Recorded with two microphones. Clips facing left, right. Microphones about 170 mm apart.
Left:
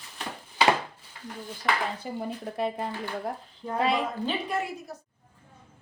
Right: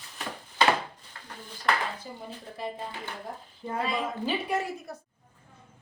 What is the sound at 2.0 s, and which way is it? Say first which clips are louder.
Speech: left 8 dB; 65° left (ahead or behind).